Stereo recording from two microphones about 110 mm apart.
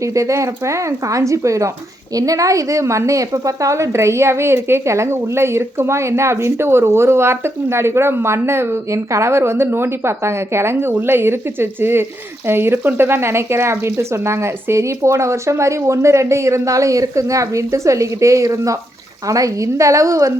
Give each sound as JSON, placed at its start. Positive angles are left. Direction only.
{"t": 0.0, "sound": "a woman's voice", "side_deg": -30}